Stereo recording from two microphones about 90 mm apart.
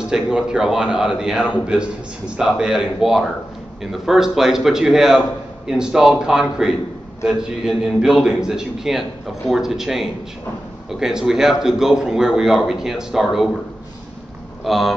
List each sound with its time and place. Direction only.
0.0 s a man's voice: 10° right (ahead or behind)
14.6 s speech: centre (ahead or behind)